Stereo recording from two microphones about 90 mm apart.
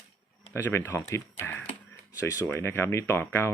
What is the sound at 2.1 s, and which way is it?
Speech, 35° left (ahead or behind).